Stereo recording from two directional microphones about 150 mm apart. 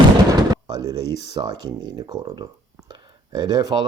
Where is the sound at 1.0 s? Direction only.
90° left.